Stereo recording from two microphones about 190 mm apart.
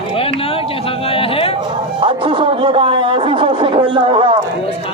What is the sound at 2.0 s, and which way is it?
Music, 25° right (ahead or behind).